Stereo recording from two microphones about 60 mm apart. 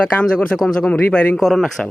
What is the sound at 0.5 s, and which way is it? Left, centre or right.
Speech, centre.